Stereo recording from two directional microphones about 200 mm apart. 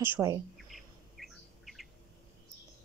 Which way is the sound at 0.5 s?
Centre (ahead or behind).